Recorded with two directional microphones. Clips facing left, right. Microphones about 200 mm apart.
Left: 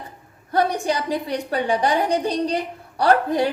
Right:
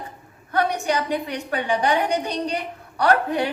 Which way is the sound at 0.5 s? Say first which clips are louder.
Left 1 dB; 35° left (ahead or behind).